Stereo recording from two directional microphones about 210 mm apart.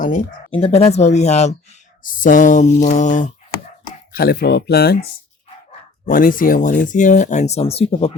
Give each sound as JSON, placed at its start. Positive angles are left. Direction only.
{"t": 0.0, "sound": "speech", "side_deg": 40}
{"t": 0.5, "sound": "speech", "side_deg": 30}
{"t": 6.1, "sound": "speech", "side_deg": 40}